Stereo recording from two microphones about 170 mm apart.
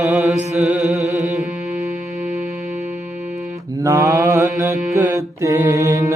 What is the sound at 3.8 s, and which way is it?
Mantra, 15° right (ahead or behind).